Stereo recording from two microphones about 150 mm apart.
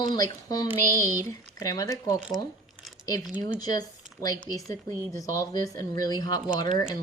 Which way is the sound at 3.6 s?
25° left (ahead or behind).